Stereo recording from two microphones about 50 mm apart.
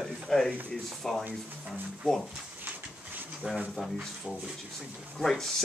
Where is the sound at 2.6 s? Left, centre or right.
Right.